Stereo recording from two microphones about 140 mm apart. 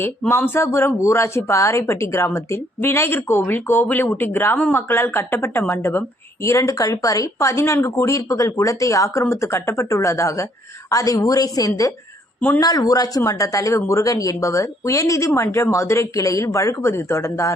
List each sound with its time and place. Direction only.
0.0 s speech: 15° left (ahead or behind)